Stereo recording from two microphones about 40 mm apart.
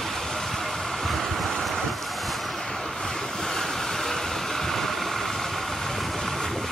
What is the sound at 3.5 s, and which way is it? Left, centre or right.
Vehicle, centre.